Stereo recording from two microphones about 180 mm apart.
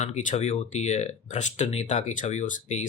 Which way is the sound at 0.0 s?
40° left (ahead or behind).